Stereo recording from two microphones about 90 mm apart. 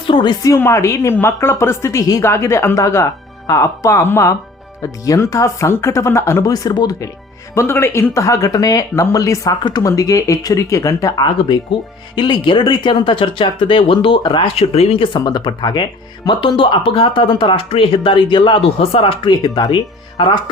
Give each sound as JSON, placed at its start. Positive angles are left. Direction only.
{"t": 0.1, "sound": "speech", "side_deg": 55}
{"t": 0.6, "sound": "a woman's voice", "side_deg": 35}
{"t": 7.5, "sound": "a woman's voice", "side_deg": 30}
{"t": 11.2, "sound": "speech", "side_deg": 50}
{"t": 14.2, "sound": "speech", "side_deg": 65}
{"t": 15.2, "sound": "speech", "side_deg": 55}
{"t": 19.3, "sound": "speech", "side_deg": 50}